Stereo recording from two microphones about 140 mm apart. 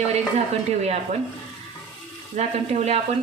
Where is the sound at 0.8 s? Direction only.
50° right (ahead or behind).